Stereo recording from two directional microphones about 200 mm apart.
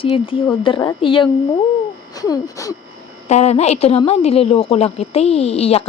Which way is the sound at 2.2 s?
20° left (ahead or behind).